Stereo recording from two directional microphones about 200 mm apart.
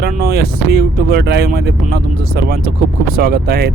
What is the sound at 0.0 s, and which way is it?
Speech, 50° right (ahead or behind).